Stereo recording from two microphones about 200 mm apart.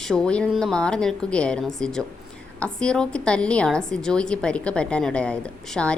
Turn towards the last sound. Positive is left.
turn(degrees=5)  # may be behind; listen again after turning